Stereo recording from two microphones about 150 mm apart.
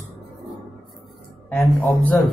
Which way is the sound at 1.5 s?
10° left (ahead or behind).